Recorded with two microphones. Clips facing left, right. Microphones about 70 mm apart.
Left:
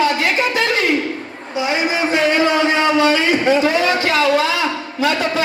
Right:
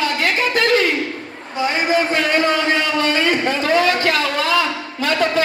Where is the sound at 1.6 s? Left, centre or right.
Right.